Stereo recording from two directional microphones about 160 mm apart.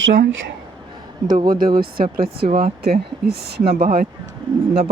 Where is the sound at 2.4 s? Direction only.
35° right (ahead or behind).